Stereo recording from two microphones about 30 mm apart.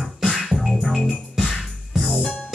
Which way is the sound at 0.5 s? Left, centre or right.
Right.